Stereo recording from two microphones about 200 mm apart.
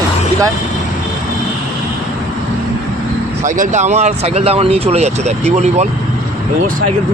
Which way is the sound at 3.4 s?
35° right (ahead or behind).